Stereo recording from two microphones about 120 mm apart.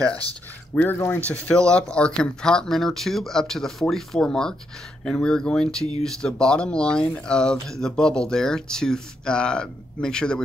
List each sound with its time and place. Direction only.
0.7 s speech: 20° left (ahead or behind)